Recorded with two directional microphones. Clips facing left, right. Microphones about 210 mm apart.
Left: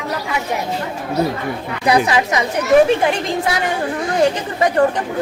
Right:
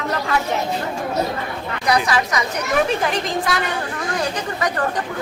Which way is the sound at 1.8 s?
25° left (ahead or behind).